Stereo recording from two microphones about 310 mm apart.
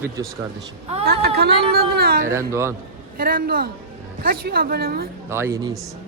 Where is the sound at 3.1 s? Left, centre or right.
Right.